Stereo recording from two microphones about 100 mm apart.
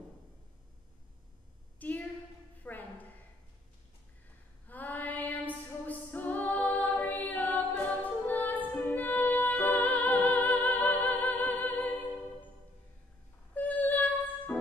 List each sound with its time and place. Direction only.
1.8 s a sound: 15° left (ahead or behind)
4.6 s female singing: 15° left (ahead or behind)
7.1 s music: 15° left (ahead or behind)
13.6 s female singing: 15° left (ahead or behind)